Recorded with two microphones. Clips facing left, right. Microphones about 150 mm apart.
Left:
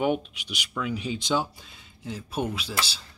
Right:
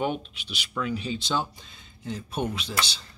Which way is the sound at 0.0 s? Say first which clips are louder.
Left 3 dB; 10° left (ahead or behind).